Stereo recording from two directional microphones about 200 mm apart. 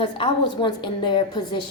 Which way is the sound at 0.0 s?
25° left (ahead or behind).